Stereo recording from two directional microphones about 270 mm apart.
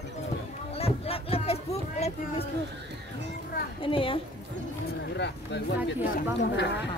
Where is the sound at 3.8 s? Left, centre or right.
Centre.